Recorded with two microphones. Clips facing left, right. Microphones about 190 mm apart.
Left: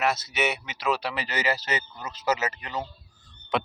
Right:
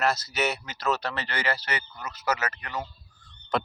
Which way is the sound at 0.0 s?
5° left (ahead or behind).